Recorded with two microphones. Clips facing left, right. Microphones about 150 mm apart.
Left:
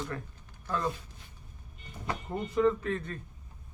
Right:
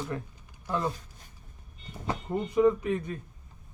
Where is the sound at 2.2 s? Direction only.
15° right (ahead or behind).